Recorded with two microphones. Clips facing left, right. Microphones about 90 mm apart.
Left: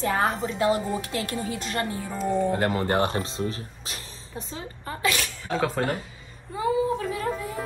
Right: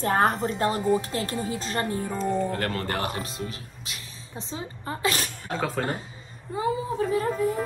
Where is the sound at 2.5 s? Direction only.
20° left (ahead or behind).